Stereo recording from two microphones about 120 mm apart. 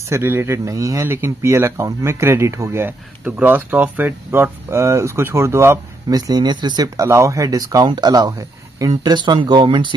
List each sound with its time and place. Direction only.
0.1 s speech: 20° right (ahead or behind)
6.1 s speech: 35° right (ahead or behind)
8.9 s speech: 40° right (ahead or behind)